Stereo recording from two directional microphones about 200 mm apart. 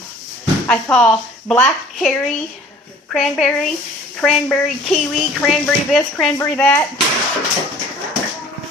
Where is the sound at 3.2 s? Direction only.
Centre (ahead or behind).